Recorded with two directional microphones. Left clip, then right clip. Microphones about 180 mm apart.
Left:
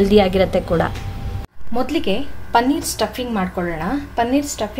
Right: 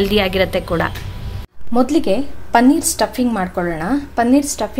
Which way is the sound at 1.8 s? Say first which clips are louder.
Right 5 dB; 30° right (ahead or behind).